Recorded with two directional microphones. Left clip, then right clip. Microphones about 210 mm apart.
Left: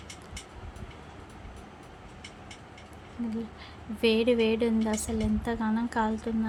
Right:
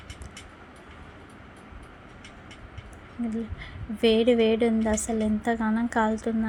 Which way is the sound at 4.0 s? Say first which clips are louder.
Right 4 dB; 10° right (ahead or behind).